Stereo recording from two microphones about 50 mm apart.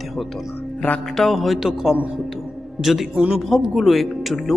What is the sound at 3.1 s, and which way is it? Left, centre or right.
Speech, centre.